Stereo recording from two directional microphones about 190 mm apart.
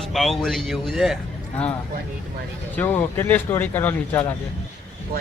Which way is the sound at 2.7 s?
10° left (ahead or behind).